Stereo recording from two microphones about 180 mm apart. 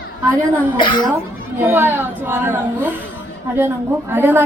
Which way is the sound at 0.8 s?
25° left (ahead or behind).